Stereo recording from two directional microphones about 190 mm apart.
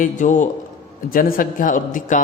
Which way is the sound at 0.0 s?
40° left (ahead or behind).